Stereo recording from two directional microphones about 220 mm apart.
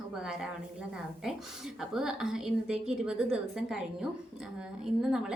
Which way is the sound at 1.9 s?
5° right (ahead or behind).